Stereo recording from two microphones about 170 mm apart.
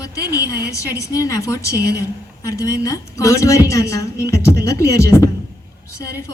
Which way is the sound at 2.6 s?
20° left (ahead or behind).